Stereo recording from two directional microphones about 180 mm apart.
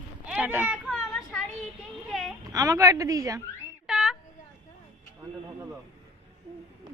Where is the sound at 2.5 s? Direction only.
20° right (ahead or behind).